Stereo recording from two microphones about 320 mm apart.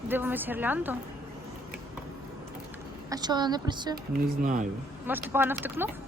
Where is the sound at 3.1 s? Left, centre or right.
Centre.